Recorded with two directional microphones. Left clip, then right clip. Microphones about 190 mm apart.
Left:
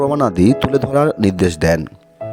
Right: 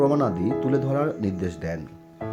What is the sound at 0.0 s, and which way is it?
Speech, 60° left (ahead or behind).